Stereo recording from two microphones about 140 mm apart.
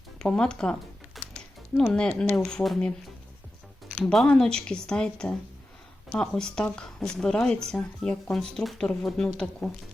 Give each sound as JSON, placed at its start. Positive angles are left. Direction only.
{"t": 0.2, "sound": "speech", "side_deg": 5}
{"t": 4.0, "sound": "speech", "side_deg": 0}